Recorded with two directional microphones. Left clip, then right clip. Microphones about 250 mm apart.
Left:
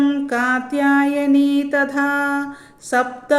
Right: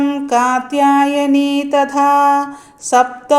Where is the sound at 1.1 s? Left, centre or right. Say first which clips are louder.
Right 2 dB; right.